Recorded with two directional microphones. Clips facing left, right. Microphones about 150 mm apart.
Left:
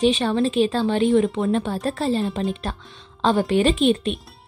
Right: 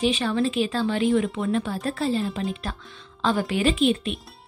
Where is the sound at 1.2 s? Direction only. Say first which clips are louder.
Left 4 dB; 40° left (ahead or behind).